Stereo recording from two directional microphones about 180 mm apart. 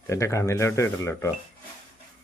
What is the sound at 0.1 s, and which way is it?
Speech, 15° left (ahead or behind).